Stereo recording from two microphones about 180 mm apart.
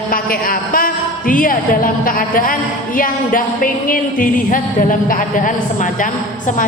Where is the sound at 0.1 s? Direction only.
50° left (ahead or behind).